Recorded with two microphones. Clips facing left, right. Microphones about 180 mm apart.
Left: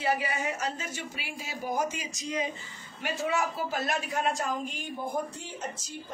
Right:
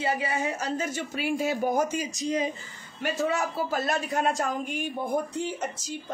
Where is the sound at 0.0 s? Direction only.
25° right (ahead or behind); by 4.8 s 50° right (ahead or behind).